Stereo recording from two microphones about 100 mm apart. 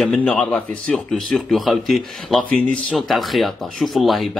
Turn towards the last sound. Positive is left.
turn(degrees=0)  # may be behind; listen again after turning